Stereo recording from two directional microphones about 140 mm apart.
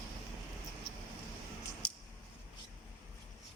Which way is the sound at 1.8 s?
10° left (ahead or behind).